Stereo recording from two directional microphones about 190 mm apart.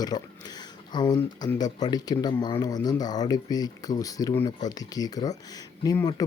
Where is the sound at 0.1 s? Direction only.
20° left (ahead or behind).